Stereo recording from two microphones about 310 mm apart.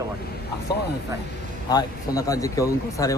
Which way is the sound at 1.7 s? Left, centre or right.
Centre.